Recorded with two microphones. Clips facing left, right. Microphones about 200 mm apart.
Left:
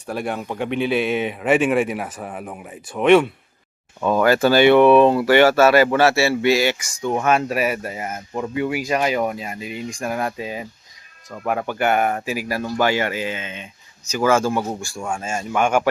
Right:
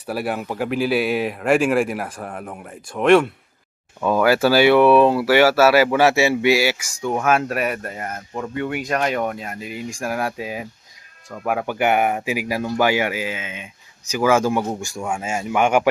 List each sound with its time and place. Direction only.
0.1 s speech: 5° right (ahead or behind)